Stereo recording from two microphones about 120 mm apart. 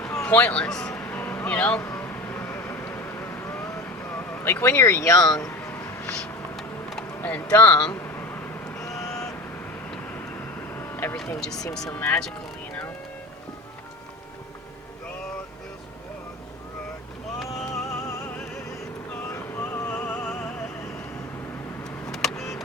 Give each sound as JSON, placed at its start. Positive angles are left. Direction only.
{"t": 0.3, "sound": "a man's voice", "side_deg": 15}
{"t": 0.9, "sound": "vehicle", "side_deg": 20}
{"t": 6.2, "sound": "vehicle", "side_deg": 5}
{"t": 7.2, "sound": "a man's voice", "side_deg": 10}
{"t": 7.9, "sound": "a sound", "side_deg": 20}
{"t": 9.0, "sound": "vehicle", "side_deg": 5}
{"t": 10.8, "sound": "vehicle", "side_deg": 20}
{"t": 11.3, "sound": "speech", "side_deg": 5}
{"t": 11.9, "sound": "speech", "side_deg": 20}
{"t": 17.4, "sound": "a sound", "side_deg": 0}
{"t": 18.3, "sound": "music", "side_deg": 5}
{"t": 19.3, "sound": "opera", "side_deg": 20}
{"t": 22.1, "sound": "vehicle", "side_deg": 5}